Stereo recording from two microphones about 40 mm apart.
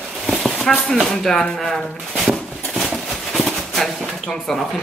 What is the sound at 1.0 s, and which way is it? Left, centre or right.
Speech, centre.